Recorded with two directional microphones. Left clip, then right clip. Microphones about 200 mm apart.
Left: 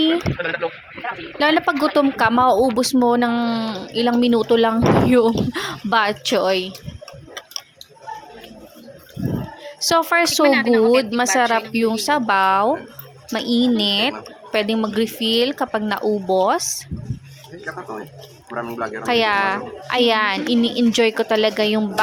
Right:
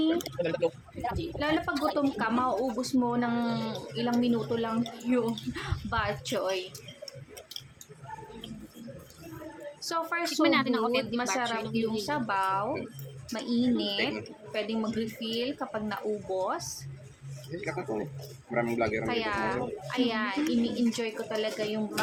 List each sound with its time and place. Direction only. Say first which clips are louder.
1.4 s speech: left 13 dB; 45° left (ahead or behind)
9.8 s speech: left 15 dB; 45° left (ahead or behind)
10.5 s speech: left 12 dB; 15° right (ahead or behind)
11.1 s speech: left 13 dB; 40° left (ahead or behind)
18.5 s a woman's voice: left 3 dB; 20° right (ahead or behind)
19.0 s speech: left 13 dB; 45° left (ahead or behind)